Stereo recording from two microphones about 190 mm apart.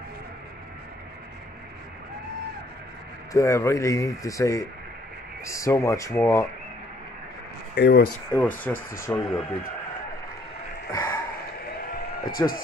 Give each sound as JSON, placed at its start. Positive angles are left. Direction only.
{"t": 3.3, "sound": "speech", "side_deg": 15}
{"t": 7.7, "sound": "speech", "side_deg": 65}
{"t": 8.3, "sound": "speech", "side_deg": 10}
{"t": 10.9, "sound": "gasp", "side_deg": 15}
{"t": 12.3, "sound": "a man's voice", "side_deg": 50}